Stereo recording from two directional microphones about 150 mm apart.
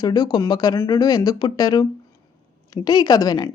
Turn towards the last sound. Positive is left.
turn(degrees=25)  # may be behind; listen again after turning